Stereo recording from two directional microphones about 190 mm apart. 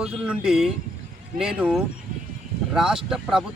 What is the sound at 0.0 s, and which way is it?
Speech, 5° right (ahead or behind).